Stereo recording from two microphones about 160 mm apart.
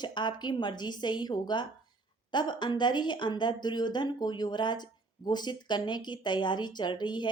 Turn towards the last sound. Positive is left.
turn(degrees=30)  # may be behind; listen again after turning